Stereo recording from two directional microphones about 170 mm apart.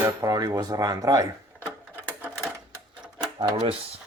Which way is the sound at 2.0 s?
10° right (ahead or behind).